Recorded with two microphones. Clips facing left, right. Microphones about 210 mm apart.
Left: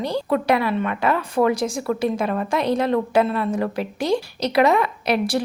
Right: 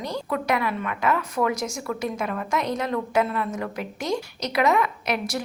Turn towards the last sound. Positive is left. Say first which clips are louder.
# left 6 dB
turn(degrees=30)  # may be behind; listen again after turning